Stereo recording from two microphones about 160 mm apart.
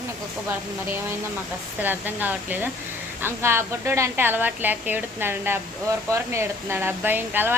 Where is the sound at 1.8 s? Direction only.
10° right (ahead or behind).